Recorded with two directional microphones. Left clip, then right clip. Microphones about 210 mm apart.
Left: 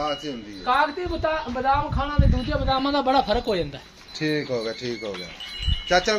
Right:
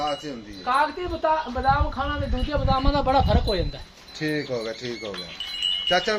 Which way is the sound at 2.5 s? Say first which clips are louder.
Even; 40° left (ahead or behind).